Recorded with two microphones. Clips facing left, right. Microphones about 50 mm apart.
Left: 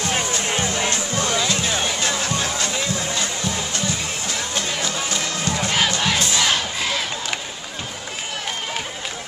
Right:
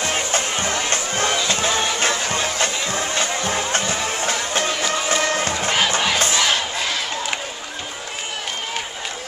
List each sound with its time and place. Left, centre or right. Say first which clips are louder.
0.8 s music: right 1 dB; right
6.1 s crowd: right 2 dB; right
6.4 s battle cry: right 1 dB; centre